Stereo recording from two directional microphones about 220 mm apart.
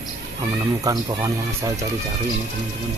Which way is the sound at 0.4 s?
15° right (ahead or behind).